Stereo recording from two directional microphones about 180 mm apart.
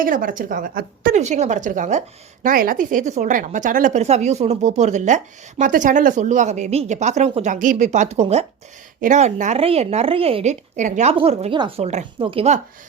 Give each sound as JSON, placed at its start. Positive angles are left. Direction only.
{"t": 0.0, "sound": "a woman's voice", "side_deg": -50}
{"t": 1.2, "sound": "a woman's voice", "side_deg": -40}